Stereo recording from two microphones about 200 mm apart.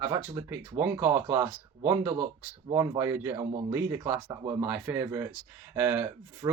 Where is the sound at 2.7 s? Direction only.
15° right (ahead or behind).